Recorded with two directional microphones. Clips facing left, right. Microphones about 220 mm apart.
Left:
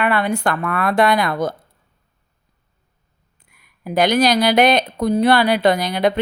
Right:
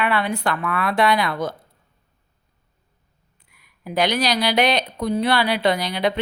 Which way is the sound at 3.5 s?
50° left (ahead or behind).